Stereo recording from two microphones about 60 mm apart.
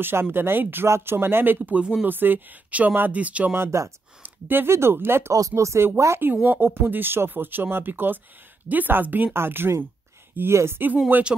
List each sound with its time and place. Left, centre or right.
0.0 s speech: right
0.8 s speech: right
3.5 s speech: right
4.2 s speech: right
5.5 s speech: right
6.2 s speech: right
9.3 s speech: right